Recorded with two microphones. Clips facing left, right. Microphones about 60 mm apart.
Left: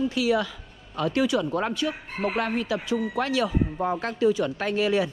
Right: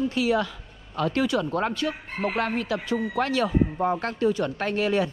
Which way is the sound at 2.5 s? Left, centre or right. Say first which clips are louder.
Even; right.